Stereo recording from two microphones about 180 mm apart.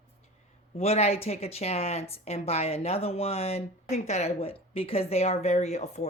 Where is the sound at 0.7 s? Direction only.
35° left (ahead or behind).